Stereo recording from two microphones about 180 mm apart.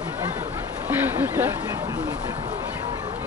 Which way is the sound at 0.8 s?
10° right (ahead or behind).